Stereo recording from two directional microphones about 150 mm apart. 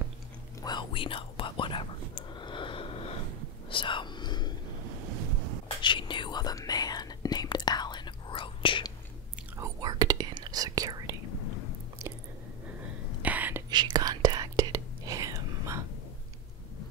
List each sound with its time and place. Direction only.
0.6 s whispering: 30° left (ahead or behind)
5.8 s whispering: 30° left (ahead or behind)
9.6 s whispering: 25° right (ahead or behind)
12.0 s chewing: 20° right (ahead or behind)
13.2 s whispering: 10° right (ahead or behind)
13.7 s whispering: 30° right (ahead or behind)